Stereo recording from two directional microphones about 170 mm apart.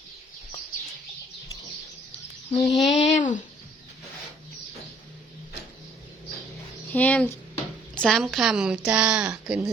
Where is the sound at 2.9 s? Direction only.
35° left (ahead or behind).